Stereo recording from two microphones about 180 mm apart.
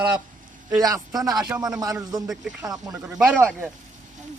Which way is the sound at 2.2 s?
Centre (ahead or behind).